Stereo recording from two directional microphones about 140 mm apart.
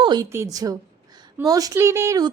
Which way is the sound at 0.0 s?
30° right (ahead or behind).